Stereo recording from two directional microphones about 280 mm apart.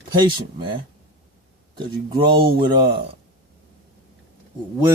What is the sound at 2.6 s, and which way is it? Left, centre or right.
Speech, centre.